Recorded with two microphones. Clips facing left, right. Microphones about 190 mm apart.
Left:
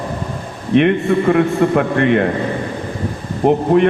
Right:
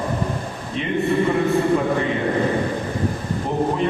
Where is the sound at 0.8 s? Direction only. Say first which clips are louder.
Left 7 dB; 70° left (ahead or behind).